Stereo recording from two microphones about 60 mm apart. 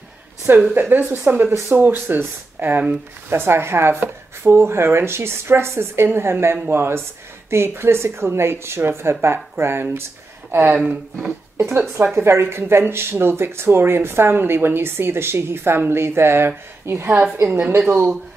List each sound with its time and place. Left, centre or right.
0.7 s speech: right
11.5 s a sound: right
12.2 s speech: right